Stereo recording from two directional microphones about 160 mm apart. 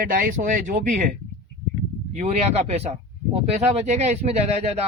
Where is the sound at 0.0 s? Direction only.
60° right (ahead or behind).